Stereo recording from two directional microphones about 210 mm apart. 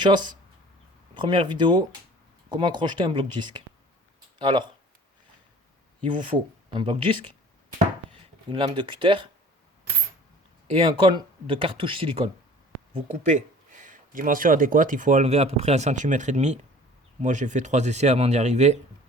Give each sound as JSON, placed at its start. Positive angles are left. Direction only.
{"t": 0.0, "sound": "speech", "side_deg": -20}
{"t": 4.4, "sound": "speech", "side_deg": -20}
{"t": 6.0, "sound": "speech", "side_deg": -25}
{"t": 11.0, "sound": "speech", "side_deg": -20}